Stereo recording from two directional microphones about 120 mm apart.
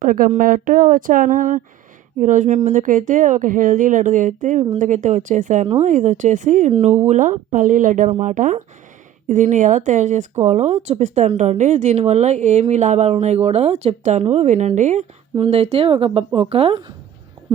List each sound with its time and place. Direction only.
0.3 s a woman's voice: 90° right
5.6 s a woman's voice: 70° right (ahead or behind); by 10.2 s 90° right
10.4 s a woman's voice: 80° right
15.4 s speech: 60° right (ahead or behind)